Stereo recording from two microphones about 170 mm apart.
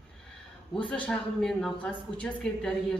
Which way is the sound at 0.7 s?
5° left (ahead or behind).